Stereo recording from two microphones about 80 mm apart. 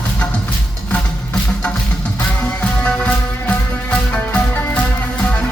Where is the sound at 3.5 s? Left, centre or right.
Centre.